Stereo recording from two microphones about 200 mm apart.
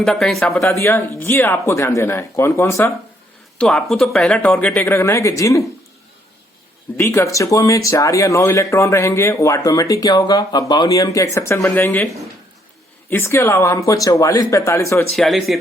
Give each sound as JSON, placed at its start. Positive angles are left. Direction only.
{"t": 0.0, "sound": "speech", "side_deg": 0}
{"t": 6.9, "sound": "speech", "side_deg": 15}
{"t": 13.1, "sound": "speech", "side_deg": 10}
{"t": 15.1, "sound": "speech", "side_deg": 0}